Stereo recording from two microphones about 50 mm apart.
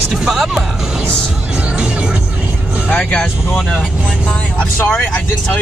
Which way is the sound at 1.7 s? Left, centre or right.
Centre.